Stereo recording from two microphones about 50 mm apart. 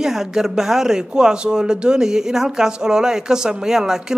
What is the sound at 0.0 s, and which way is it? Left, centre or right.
Speech, centre.